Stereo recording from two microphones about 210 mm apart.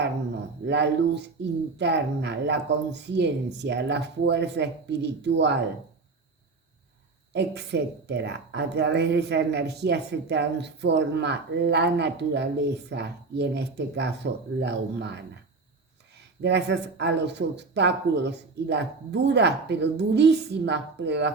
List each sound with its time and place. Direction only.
0.7 s a woman's voice: 55° right (ahead or behind)
7.3 s a woman's voice: 55° right (ahead or behind)
16.4 s a woman's voice: 55° right (ahead or behind)